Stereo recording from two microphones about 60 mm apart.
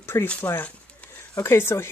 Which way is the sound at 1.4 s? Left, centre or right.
Left.